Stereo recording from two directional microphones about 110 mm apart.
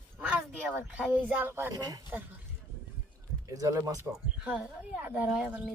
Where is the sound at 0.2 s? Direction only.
10° right (ahead or behind).